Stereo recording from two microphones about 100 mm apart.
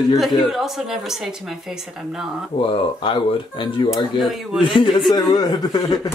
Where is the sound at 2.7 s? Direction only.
60° left (ahead or behind).